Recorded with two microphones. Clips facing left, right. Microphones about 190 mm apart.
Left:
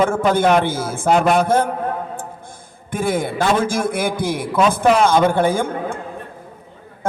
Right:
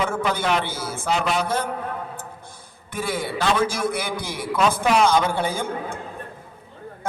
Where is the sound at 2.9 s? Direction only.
50° left (ahead or behind).